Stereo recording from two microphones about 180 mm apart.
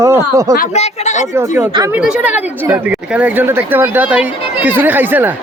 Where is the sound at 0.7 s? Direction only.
40° left (ahead or behind).